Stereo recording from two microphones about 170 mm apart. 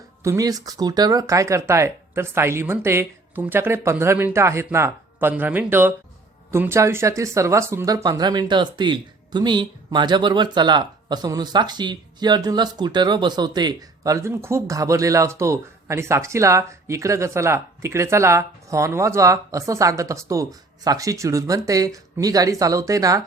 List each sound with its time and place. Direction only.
0.2 s speech: 20° right (ahead or behind)